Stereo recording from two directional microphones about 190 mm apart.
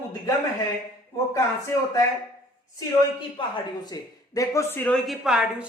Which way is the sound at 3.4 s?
25° left (ahead or behind).